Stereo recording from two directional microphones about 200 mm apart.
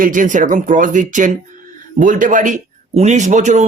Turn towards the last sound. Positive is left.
turn(degrees=-35)  # may be behind; listen again after turning